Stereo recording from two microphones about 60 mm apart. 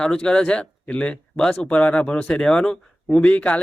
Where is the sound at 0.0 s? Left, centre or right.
Centre.